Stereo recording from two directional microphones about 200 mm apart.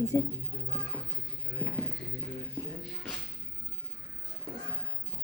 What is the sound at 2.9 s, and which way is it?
Music, centre (ahead or behind).